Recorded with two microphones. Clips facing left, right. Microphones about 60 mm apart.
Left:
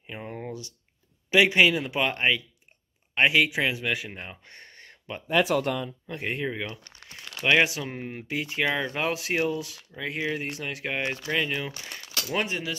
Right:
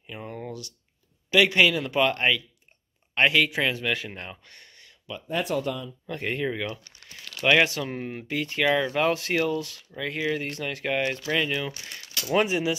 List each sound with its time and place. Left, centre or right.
0.0 s a sound: centre
1.3 s speech: centre
4.5 s a sound: left
5.3 s speech: left
6.0 s speech: centre
7.2 s crumpling: left
7.5 s speech: centre
12.3 s speech: centre